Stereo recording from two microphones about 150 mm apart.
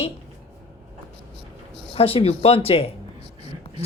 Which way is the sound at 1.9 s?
40° left (ahead or behind).